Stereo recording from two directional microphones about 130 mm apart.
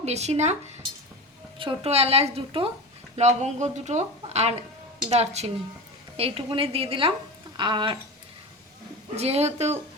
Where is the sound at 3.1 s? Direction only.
60° right (ahead or behind); by 8.0 s 35° right (ahead or behind).